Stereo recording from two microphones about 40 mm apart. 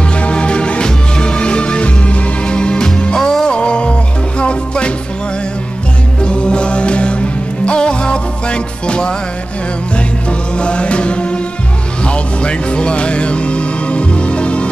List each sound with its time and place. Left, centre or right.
0.1 s music: left
6.2 s music: left
10.5 s music: left